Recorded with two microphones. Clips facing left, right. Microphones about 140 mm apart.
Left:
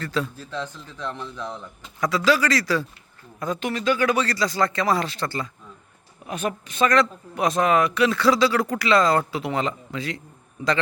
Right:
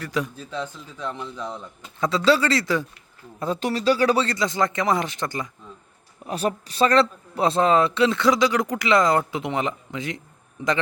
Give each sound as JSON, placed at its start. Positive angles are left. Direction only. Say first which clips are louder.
{"t": 0.0, "sound": "a man's voice", "louder": "even", "side_deg": -15}
{"t": 2.0, "sound": "a man's voice", "louder": "right 1 dB", "side_deg": -25}
{"t": 3.4, "sound": "a man's voice", "louder": "right 2 dB", "side_deg": -35}
{"t": 6.2, "sound": "a man's voice", "louder": "right 2 dB", "side_deg": -35}